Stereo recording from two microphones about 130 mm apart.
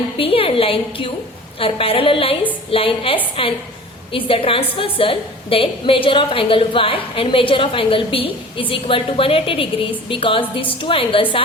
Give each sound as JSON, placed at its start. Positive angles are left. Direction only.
{"t": 0.2, "sound": "a woman's voice", "side_deg": 45}